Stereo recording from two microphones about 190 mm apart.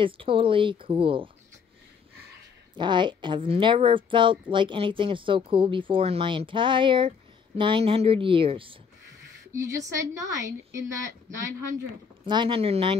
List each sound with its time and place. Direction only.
0.0 s speech: 25° right (ahead or behind)
2.7 s speech: 25° right (ahead or behind)
9.5 s a woman's voice: 15° right (ahead or behind)
12.3 s speech: 25° right (ahead or behind)